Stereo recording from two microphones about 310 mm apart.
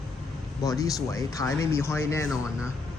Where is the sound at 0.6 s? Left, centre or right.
Centre.